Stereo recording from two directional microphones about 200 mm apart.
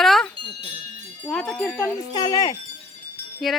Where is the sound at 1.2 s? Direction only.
5° left (ahead or behind).